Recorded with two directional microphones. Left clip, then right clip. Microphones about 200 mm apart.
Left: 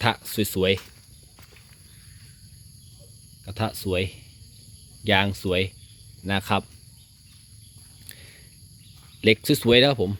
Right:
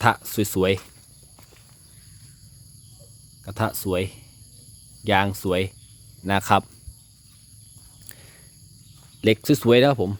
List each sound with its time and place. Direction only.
0.3 s speech: 15° right (ahead or behind)
3.4 s speech: 15° right (ahead or behind)
8.0 s a sound: 10° right (ahead or behind)
9.2 s speech: 10° right (ahead or behind)